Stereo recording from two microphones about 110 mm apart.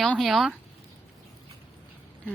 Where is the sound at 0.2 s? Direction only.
Centre (ahead or behind).